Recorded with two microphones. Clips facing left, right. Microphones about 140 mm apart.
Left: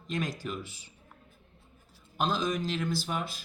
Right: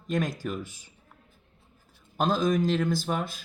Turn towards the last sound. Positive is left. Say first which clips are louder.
# right 4 dB
turn(degrees=-50)  # may be behind; listen again after turning